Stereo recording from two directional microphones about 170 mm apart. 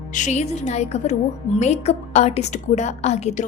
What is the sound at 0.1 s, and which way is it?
A woman's voice, 45° left (ahead or behind).